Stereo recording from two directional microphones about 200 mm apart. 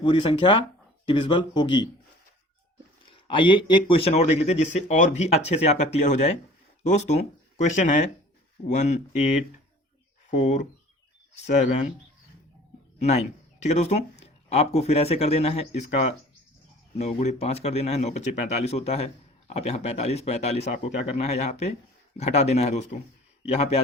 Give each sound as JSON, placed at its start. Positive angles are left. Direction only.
{"t": 0.0, "sound": "speech", "side_deg": 25}
{"t": 3.1, "sound": "speech", "side_deg": 25}
{"t": 13.0, "sound": "speech", "side_deg": 35}